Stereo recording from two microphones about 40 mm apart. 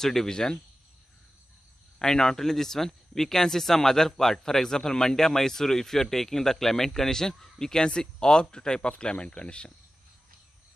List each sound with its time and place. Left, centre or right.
0.0 s speech: centre
2.0 s speech: centre